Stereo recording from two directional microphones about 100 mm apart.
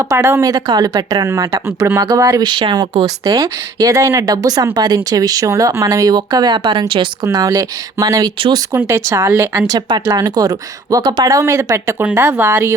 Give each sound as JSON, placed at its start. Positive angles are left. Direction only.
{"t": 0.0, "sound": "speech", "side_deg": -30}
{"t": 2.5, "sound": "speech", "side_deg": -50}
{"t": 7.3, "sound": "speech", "side_deg": -35}
{"t": 8.4, "sound": "speech", "side_deg": -50}
{"t": 8.7, "sound": "speech", "side_deg": -30}
{"t": 9.6, "sound": "speech", "side_deg": -40}